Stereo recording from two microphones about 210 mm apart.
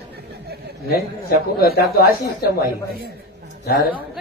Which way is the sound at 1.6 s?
45° left (ahead or behind).